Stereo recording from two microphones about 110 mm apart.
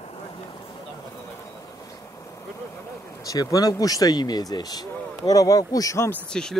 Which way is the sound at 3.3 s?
35° left (ahead or behind).